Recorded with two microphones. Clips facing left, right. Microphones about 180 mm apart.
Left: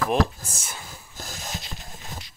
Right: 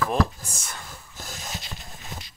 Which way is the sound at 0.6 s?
5° left (ahead or behind).